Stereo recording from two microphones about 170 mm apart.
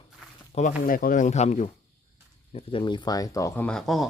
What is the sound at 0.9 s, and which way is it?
Speech, 55° left (ahead or behind).